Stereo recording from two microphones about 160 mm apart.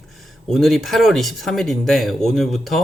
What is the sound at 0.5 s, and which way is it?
Speech, centre (ahead or behind).